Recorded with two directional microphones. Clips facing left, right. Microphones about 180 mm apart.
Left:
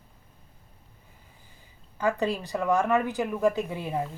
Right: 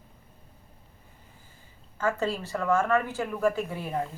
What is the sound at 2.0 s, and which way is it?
A woman's voice, 15° left (ahead or behind).